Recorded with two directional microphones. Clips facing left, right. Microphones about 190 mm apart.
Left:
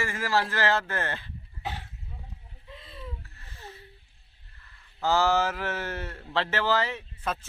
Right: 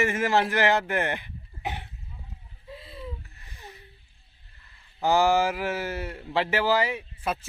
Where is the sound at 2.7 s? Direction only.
25° right (ahead or behind).